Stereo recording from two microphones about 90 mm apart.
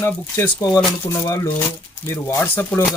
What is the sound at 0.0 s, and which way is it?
Speech, 25° left (ahead or behind).